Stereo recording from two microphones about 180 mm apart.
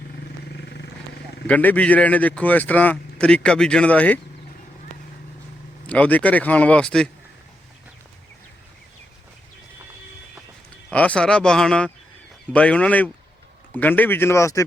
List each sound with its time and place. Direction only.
0.5 s vehicle: 70° left (ahead or behind)
1.5 s speech: 10° left (ahead or behind)
5.9 s speech: 10° left (ahead or behind)
10.9 s speech: 5° left (ahead or behind)